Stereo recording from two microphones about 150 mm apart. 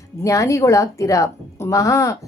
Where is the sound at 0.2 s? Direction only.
20° left (ahead or behind).